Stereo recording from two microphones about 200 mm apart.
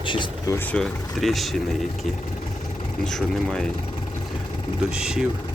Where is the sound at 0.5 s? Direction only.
5° left (ahead or behind).